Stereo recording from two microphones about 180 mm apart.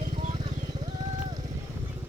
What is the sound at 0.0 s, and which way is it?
Vehicle, 45° right (ahead or behind).